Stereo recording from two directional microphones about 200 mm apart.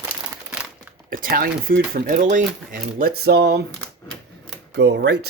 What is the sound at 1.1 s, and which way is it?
Speech, 45° right (ahead or behind).